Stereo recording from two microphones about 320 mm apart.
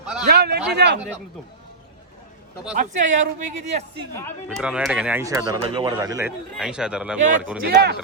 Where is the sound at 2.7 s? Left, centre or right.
Right.